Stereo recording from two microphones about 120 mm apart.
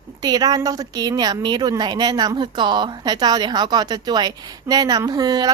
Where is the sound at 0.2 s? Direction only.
35° right (ahead or behind).